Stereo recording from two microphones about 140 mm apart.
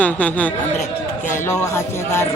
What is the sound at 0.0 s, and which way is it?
Speech, 10° left (ahead or behind).